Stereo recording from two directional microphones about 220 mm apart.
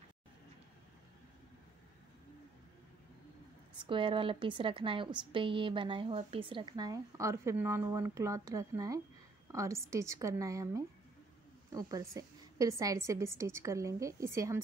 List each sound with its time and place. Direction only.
3.8 s a woman's voice: 25° right (ahead or behind)
11.9 s a woman's voice: 15° right (ahead or behind)